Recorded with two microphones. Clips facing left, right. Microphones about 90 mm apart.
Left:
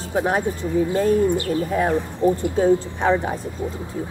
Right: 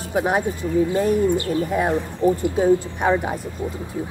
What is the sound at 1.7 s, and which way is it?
Speech, 15° right (ahead or behind).